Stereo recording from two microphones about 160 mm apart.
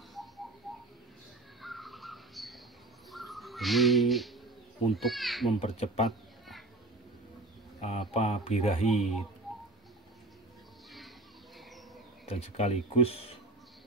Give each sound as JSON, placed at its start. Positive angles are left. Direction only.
{"t": 1.6, "sound": "bird", "side_deg": 0}
{"t": 4.9, "sound": "speech", "side_deg": 0}
{"t": 5.6, "sound": "speech", "side_deg": 40}
{"t": 7.8, "sound": "speech", "side_deg": 40}
{"t": 12.3, "sound": "speech", "side_deg": 40}